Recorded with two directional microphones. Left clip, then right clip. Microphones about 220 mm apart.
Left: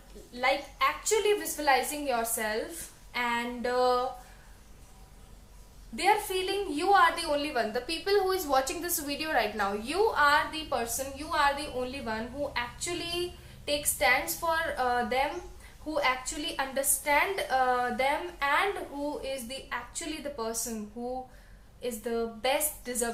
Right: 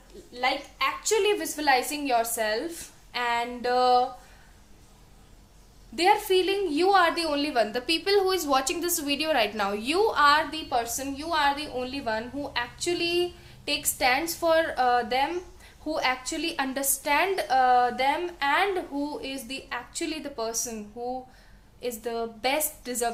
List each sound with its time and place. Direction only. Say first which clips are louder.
0.3 s a woman's voice: right 1 dB; 45° right (ahead or behind)
6.0 s a woman's voice: right 5 dB; 45° right (ahead or behind)